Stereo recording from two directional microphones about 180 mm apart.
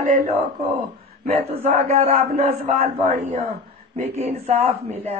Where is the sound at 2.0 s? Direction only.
45° right (ahead or behind).